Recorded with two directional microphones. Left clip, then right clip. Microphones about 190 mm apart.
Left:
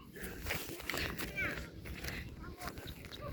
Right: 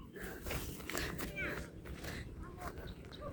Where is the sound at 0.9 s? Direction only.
20° right (ahead or behind).